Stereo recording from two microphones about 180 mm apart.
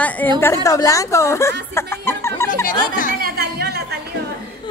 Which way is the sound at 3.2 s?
60° right (ahead or behind).